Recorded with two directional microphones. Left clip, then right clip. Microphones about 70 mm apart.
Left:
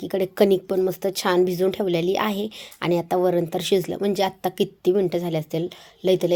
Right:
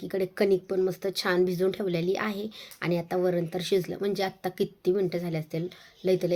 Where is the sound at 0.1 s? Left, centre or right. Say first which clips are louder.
Left 6 dB; left.